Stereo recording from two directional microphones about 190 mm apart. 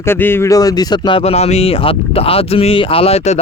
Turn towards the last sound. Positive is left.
turn(degrees=35)  # may be behind; listen again after turning